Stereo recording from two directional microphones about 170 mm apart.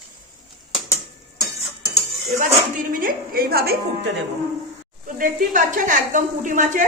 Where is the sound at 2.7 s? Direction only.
55° right (ahead or behind).